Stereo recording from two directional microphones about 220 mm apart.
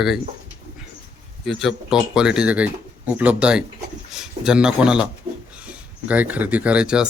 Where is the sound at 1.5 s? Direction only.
Centre (ahead or behind).